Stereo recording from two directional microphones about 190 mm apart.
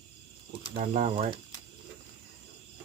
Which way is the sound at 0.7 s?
40° right (ahead or behind).